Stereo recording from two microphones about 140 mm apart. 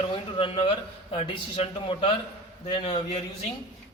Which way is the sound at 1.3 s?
35° left (ahead or behind).